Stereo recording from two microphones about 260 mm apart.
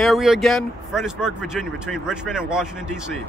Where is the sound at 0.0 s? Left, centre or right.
Centre.